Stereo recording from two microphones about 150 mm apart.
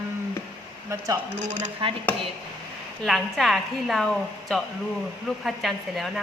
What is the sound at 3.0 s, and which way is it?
A woman's voice, centre (ahead or behind).